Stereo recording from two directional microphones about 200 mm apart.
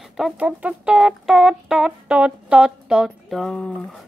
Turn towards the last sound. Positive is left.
turn(degrees=5)  # may be behind; listen again after turning